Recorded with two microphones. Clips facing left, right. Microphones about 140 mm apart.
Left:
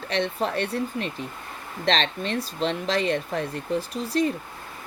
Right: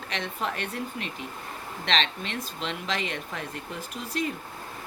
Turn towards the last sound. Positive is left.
turn(degrees=35)  # may be behind; listen again after turning